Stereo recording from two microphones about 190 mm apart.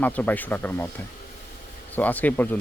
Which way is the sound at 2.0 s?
10° left (ahead or behind).